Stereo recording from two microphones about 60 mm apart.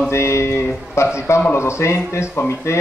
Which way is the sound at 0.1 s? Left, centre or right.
Left.